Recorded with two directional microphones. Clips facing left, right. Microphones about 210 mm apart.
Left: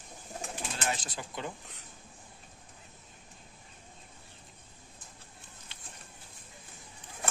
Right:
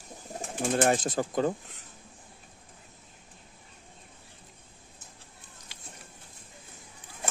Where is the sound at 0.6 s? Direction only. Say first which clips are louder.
Right 13 dB; 50° right (ahead or behind).